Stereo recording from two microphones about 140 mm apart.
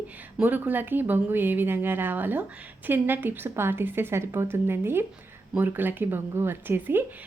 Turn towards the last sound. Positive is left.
turn(degrees=-15)  # may be behind; listen again after turning